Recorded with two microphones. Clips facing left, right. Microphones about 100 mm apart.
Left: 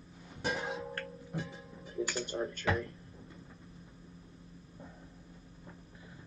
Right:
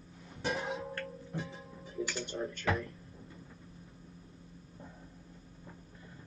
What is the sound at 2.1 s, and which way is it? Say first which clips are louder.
Speech: left 2 dB; 40° left (ahead or behind).